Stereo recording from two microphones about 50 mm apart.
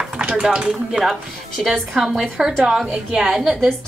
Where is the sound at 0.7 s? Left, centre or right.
Centre.